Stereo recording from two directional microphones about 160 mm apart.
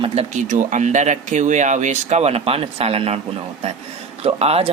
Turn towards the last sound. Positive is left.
turn(degrees=-40)  # may be behind; listen again after turning